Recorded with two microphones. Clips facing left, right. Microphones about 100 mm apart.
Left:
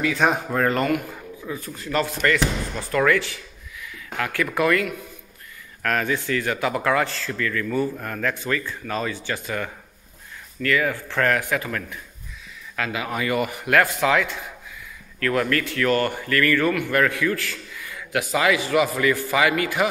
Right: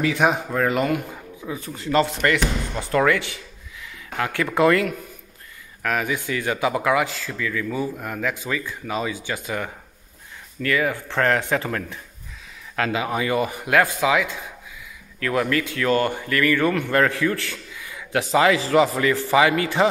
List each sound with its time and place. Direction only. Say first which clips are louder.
0.3 s speech: even; centre (ahead or behind)
1.5 s a man's voice: right 4 dB; 25° right (ahead or behind)
5.8 s a man's voice: left 1 dB; 10° right (ahead or behind)
16.7 s a man's voice: right 1 dB; 30° right (ahead or behind)